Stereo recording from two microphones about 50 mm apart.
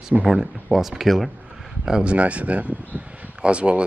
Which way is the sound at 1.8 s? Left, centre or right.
Centre.